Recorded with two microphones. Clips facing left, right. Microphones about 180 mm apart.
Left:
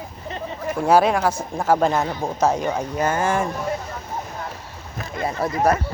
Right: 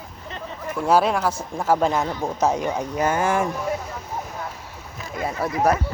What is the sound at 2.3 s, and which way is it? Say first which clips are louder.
A woman's voice: left 2 dB; 15° right (ahead or behind).